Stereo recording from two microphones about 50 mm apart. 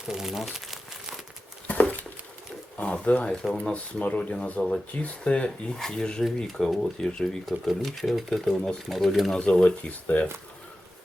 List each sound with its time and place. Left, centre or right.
0.1 s crumpling: centre
1.6 s dog: left
2.8 s speech: left
5.7 s speech: centre
6.2 s speech: centre
9.3 s speech: centre